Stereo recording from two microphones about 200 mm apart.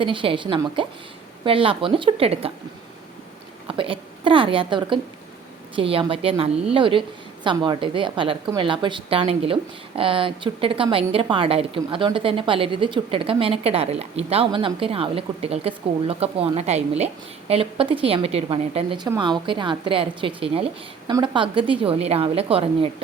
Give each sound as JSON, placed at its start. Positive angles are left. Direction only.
{"t": 0.0, "sound": "a woman's voice", "side_deg": -25}
{"t": 3.7, "sound": "a woman's voice", "side_deg": -25}